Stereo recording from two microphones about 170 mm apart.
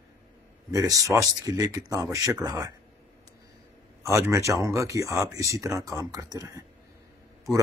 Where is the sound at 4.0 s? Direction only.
15° right (ahead or behind).